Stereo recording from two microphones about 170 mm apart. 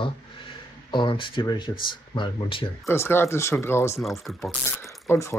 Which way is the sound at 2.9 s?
15° left (ahead or behind).